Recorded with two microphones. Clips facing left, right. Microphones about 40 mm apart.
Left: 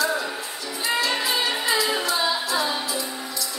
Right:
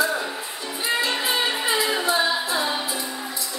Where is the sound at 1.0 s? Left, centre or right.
Right.